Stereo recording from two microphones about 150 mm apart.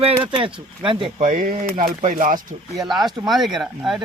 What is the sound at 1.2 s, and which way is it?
Speech, 60° right (ahead or behind).